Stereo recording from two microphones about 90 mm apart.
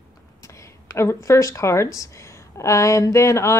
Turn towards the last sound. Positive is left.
turn(degrees=30)  # may be behind; listen again after turning